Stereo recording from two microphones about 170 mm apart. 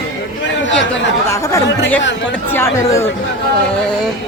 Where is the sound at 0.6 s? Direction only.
90° left.